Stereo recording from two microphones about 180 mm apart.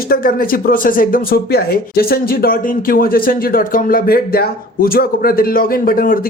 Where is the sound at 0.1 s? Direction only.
55° left (ahead or behind).